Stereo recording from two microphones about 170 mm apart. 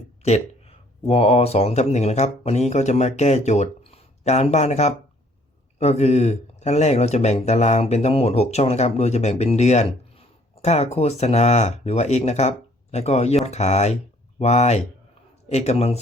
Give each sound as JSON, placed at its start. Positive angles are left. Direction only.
{"t": 0.2, "sound": "a man's voice", "side_deg": 40}